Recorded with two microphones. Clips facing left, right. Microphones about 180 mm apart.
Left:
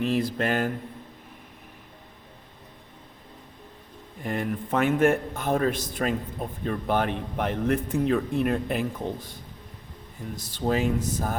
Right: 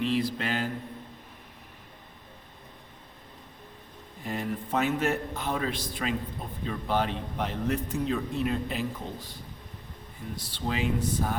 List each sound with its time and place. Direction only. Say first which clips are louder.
0.0 s a man's voice: left 3 dB; 45° left (ahead or behind)
4.2 s a man's voice: left 4 dB; 55° left (ahead or behind)
10.3 s a man's voice: left 7 dB; 45° left (ahead or behind)